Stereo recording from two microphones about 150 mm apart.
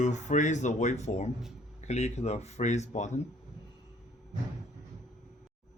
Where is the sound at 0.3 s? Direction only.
55° left (ahead or behind).